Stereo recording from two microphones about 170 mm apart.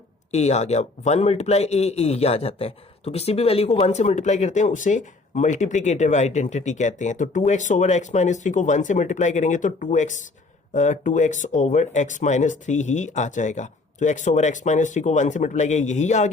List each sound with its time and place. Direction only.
0.3 s a man's voice: 40° left (ahead or behind)